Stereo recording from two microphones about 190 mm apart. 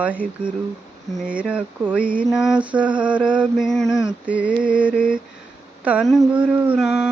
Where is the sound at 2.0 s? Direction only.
45° right (ahead or behind).